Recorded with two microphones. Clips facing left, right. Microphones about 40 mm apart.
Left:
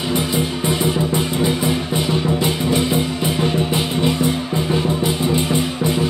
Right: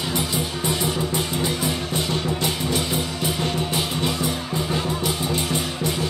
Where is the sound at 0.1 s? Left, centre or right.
Left.